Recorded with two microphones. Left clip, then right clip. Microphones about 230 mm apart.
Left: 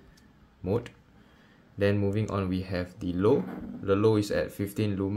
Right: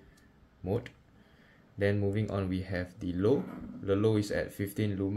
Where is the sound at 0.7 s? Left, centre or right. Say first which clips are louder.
Left 4 dB; centre.